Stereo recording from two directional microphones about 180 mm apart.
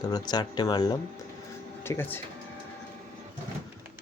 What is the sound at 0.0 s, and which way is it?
Speech, 20° left (ahead or behind).